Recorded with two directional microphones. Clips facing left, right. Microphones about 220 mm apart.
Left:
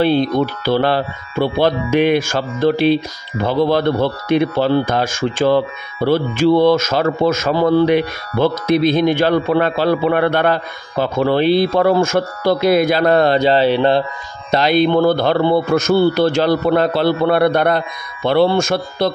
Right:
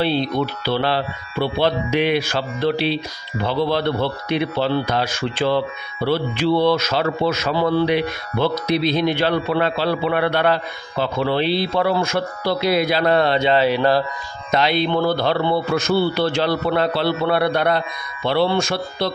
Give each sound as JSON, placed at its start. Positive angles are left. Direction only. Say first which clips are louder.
{"t": 0.0, "sound": "a man's voice", "louder": "left 5 dB", "side_deg": 50}
{"t": 14.5, "sound": "a man's voice", "louder": "left 5 dB", "side_deg": 45}